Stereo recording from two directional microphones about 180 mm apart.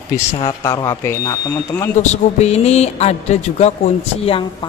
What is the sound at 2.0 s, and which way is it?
Speech, 40° left (ahead or behind).